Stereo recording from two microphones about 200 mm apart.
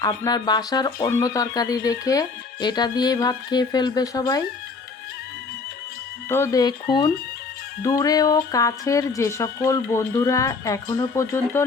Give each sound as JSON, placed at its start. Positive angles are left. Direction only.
{"t": 0.0, "sound": "speech", "side_deg": 20}
{"t": 6.2, "sound": "speech", "side_deg": 10}
{"t": 7.8, "sound": "speech", "side_deg": 15}